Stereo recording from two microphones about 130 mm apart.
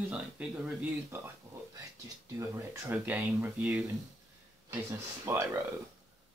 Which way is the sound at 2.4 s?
20° right (ahead or behind).